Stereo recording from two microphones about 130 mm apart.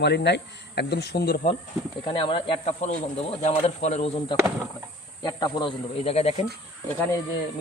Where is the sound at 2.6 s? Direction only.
60° left (ahead or behind).